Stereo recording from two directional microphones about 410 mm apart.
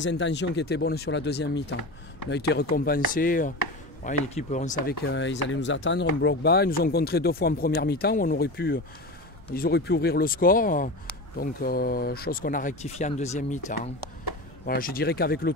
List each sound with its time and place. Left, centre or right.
0.0 s speech: left